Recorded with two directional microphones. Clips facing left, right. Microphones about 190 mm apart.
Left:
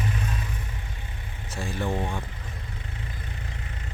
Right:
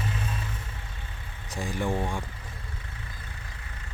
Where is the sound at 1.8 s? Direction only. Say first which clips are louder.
Even; centre (ahead or behind).